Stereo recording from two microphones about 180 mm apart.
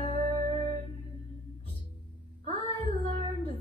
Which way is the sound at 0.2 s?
30° right (ahead or behind).